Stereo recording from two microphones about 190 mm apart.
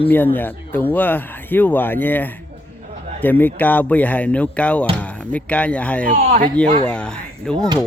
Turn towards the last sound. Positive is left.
turn(degrees=5)  # may be behind; listen again after turning